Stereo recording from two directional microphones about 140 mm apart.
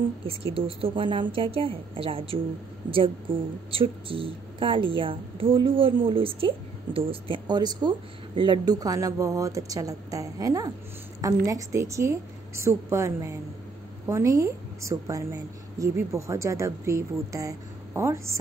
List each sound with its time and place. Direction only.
0.6 s a woman's voice: 40° right (ahead or behind); by 18.4 s 20° right (ahead or behind)